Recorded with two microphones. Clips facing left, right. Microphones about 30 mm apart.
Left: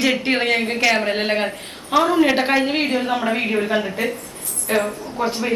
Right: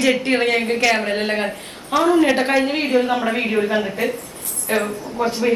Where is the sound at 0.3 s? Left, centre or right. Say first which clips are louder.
Right 1 dB; centre.